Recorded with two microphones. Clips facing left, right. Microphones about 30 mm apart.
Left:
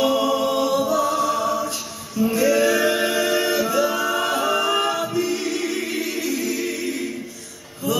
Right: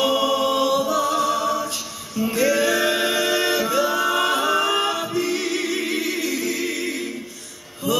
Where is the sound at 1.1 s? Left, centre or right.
Right.